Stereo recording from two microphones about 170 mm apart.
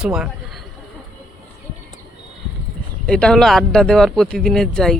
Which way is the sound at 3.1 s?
5° left (ahead or behind).